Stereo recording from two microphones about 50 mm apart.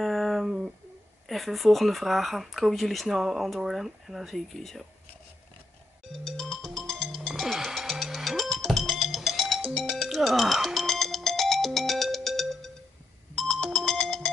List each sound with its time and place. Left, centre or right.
0.0 s a sound: centre
0.5 s a sound: centre
1.2 s speech: centre
4.6 s speech: centre
6.2 s music: centre
13.4 s ringtone: centre